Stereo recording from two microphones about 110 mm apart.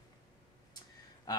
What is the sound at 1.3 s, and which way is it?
Speech, 40° left (ahead or behind).